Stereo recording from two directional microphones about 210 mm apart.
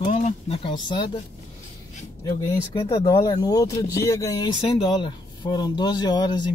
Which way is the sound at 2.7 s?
20° left (ahead or behind).